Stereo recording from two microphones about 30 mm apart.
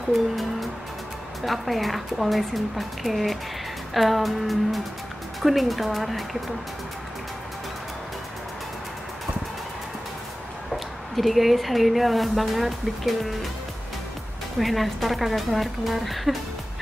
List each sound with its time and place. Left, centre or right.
1.4 s speech: centre
11.1 s speech: centre
14.6 s speech: centre